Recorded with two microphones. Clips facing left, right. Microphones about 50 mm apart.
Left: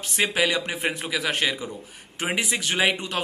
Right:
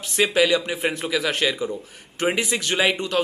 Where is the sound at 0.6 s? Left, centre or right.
Left.